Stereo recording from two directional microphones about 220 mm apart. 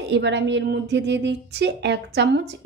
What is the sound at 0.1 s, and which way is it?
A woman's voice, 50° right (ahead or behind).